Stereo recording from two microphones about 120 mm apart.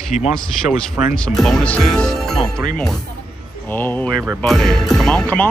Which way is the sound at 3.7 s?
15° left (ahead or behind).